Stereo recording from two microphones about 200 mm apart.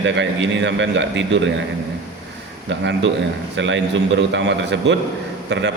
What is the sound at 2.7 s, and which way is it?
A man's voice, 70° right (ahead or behind).